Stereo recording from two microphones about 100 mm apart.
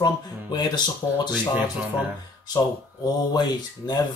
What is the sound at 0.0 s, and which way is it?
Speech, 45° left (ahead or behind).